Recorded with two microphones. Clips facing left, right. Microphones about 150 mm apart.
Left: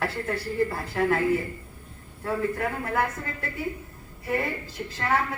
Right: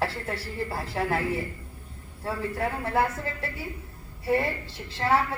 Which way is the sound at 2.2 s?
30° right (ahead or behind).